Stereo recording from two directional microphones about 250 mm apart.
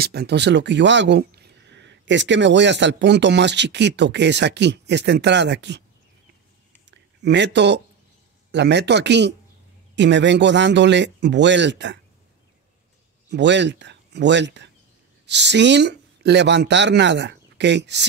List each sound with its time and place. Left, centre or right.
0.0 s speech: right
6.9 s a sound: right
8.5 s speech: right
13.3 s a man's voice: right